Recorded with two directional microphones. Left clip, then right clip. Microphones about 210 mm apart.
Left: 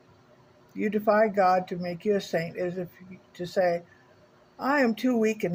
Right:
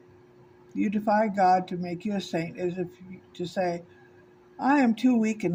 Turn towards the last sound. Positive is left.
turn(degrees=20)  # may be behind; listen again after turning